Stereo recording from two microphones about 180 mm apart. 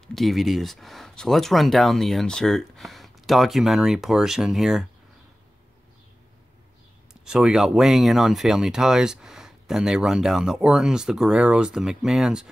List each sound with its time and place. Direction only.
0.0 s speech: centre (ahead or behind)
7.2 s speech: 5° right (ahead or behind)